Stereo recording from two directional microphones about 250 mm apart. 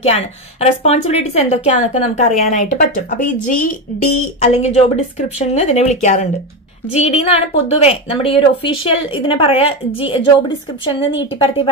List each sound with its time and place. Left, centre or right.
0.0 s a woman's voice: left
11.3 s a woman's voice: left